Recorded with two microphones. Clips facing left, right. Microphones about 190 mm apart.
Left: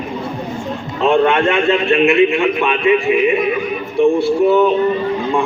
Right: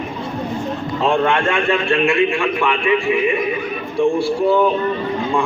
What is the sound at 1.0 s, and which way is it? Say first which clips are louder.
A man's voice: left 4 dB; 20° left (ahead or behind).